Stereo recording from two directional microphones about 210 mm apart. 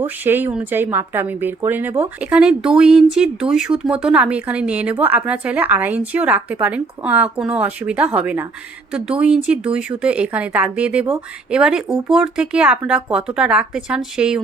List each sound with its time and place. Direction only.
0.0 s speech: 10° right (ahead or behind)